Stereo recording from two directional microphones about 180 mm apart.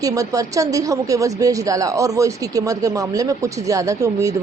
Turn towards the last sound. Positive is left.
turn(degrees=-15)  # may be behind; listen again after turning